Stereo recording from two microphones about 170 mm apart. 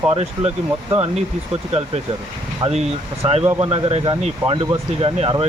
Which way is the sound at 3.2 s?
35° right (ahead or behind).